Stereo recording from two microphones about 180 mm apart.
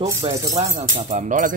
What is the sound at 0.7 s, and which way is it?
Speech, 45° right (ahead or behind).